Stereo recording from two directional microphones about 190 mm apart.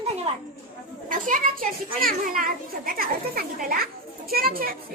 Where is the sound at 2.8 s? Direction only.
50° right (ahead or behind).